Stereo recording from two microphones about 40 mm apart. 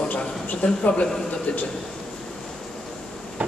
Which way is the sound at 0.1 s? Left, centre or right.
Left.